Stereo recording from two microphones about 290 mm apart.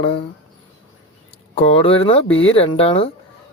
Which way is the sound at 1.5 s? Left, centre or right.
Centre.